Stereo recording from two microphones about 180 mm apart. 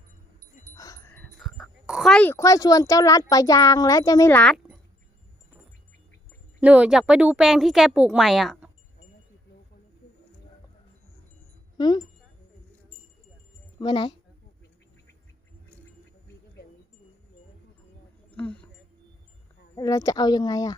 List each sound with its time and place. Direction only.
0.8 s speech: 15° left (ahead or behind)
6.6 s speech: 5° right (ahead or behind)
11.8 s speech: 25° left (ahead or behind)
13.7 s a woman's voice: 25° left (ahead or behind)
18.3 s a sound: 5° left (ahead or behind)
19.7 s speech: 20° left (ahead or behind)